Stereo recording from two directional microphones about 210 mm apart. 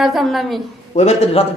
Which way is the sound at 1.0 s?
30° left (ahead or behind).